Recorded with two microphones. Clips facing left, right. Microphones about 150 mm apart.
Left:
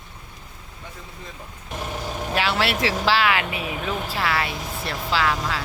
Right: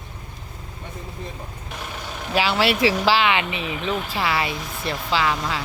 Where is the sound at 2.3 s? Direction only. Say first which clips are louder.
Right 3 dB; centre (ahead or behind).